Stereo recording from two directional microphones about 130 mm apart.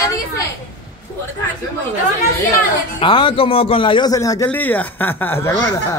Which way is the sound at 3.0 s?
40° left (ahead or behind).